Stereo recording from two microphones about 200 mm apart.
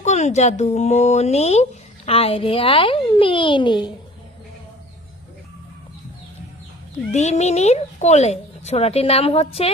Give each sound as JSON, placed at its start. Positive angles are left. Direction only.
{"t": 0.0, "sound": "a child's voice", "side_deg": 35}
{"t": 7.1, "sound": "speech", "side_deg": 35}